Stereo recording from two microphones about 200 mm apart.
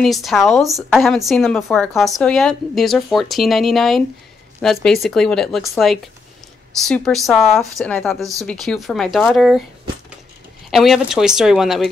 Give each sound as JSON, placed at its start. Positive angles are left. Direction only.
{"t": 0.0, "sound": "speech", "side_deg": 0}
{"t": 7.2, "sound": "speech", "side_deg": 0}
{"t": 8.2, "sound": "speech", "side_deg": -15}
{"t": 8.5, "sound": "speech", "side_deg": 0}
{"t": 10.7, "sound": "speech", "side_deg": 0}